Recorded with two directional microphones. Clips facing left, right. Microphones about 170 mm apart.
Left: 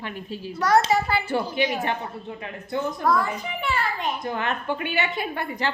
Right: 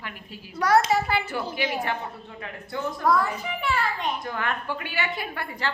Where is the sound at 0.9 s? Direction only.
Centre (ahead or behind).